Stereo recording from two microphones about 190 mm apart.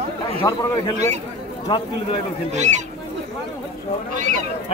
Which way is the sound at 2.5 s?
35° right (ahead or behind).